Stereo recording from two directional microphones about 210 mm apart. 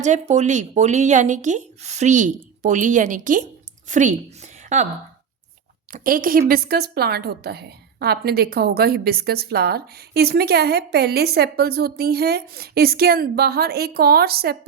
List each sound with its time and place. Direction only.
0.0 s a woman's voice: 35° right (ahead or behind)
5.9 s a woman's voice: 40° right (ahead or behind)